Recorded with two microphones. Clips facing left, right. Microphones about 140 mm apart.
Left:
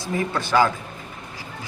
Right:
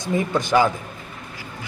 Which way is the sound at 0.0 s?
15° right (ahead or behind).